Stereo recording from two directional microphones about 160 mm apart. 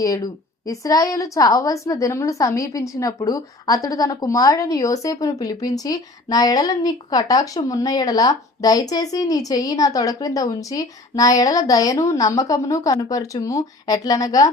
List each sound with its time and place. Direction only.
0.0 s a woman's voice: 20° left (ahead or behind)